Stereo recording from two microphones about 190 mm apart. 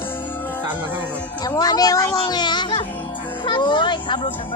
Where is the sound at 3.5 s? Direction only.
25° left (ahead or behind).